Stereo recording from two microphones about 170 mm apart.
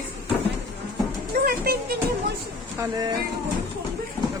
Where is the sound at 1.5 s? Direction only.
65° right (ahead or behind).